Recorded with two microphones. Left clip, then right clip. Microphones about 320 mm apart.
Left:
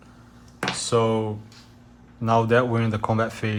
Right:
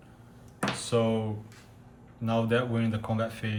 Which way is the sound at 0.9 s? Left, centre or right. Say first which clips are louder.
Left 6 dB; centre.